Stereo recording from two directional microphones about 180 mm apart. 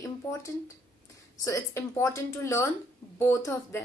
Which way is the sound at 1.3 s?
20° left (ahead or behind).